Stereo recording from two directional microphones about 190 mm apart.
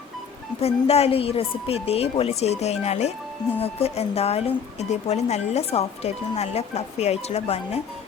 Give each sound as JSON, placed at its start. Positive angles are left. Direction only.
{"t": 0.6, "sound": "speech", "side_deg": 35}